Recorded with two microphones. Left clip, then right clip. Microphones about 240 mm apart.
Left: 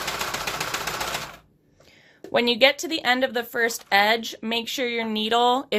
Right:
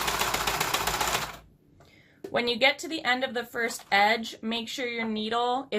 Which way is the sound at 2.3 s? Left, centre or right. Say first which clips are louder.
Left 5 dB; left.